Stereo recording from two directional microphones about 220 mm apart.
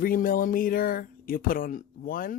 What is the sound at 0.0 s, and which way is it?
Speech, 40° left (ahead or behind).